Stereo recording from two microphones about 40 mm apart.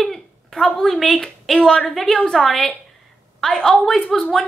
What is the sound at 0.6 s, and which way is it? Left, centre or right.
A woman's voice, centre.